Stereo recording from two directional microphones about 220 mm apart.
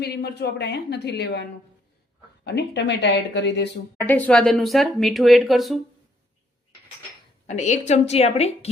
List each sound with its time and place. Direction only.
0.0 s a woman's voice: 45° left (ahead or behind)
4.0 s speech: 5° left (ahead or behind)
7.4 s a woman's voice: 30° left (ahead or behind)